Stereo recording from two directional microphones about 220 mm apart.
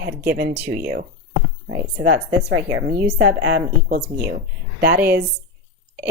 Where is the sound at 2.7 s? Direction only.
40° right (ahead or behind).